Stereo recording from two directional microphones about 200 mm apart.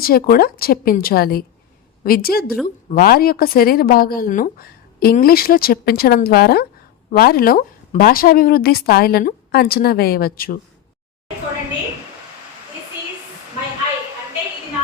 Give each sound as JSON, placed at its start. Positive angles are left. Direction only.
{"t": 0.0, "sound": "a woman's voice", "side_deg": 50}